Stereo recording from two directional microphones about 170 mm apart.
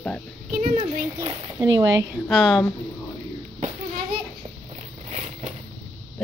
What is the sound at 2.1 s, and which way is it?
Speech, centre (ahead or behind).